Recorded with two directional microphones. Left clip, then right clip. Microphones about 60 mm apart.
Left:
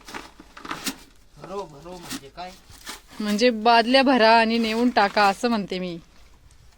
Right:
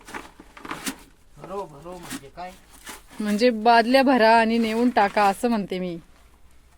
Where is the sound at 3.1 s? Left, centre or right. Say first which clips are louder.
Even; right.